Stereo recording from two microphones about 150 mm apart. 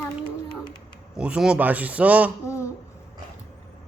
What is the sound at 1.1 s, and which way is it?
A man's voice, 5° right (ahead or behind).